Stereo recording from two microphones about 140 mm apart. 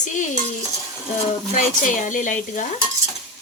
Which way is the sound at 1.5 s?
65° left (ahead or behind).